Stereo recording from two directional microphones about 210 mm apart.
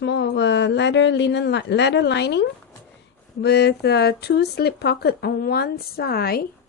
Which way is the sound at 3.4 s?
50° left (ahead or behind).